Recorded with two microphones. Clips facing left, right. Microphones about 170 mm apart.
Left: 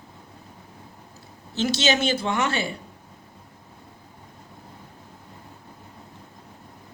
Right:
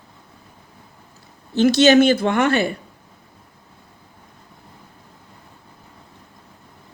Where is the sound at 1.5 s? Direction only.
55° right (ahead or behind).